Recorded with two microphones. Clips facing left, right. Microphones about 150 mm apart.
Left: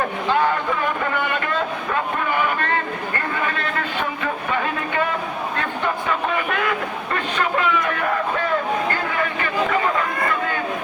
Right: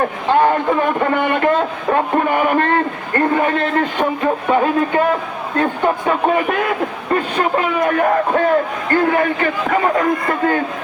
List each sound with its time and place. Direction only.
0.3 s a man's voice: 45° right (ahead or behind)
1.9 s a sound: 45° right (ahead or behind)
5.8 s a man's voice: 40° right (ahead or behind)